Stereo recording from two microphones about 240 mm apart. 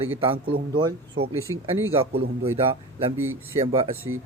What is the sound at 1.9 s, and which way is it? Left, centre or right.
Speech, right.